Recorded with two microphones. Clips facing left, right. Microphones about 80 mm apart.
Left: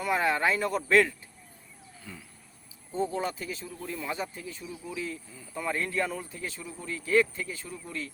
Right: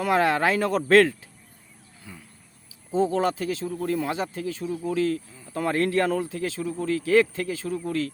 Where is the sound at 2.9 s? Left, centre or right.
Right.